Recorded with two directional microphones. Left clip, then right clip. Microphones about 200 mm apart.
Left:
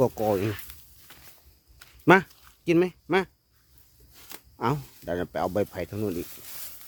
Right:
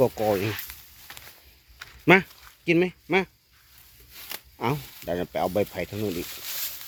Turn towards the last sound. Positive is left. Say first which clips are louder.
# right 1 dB
turn(degrees=0)  # may be behind; listen again after turning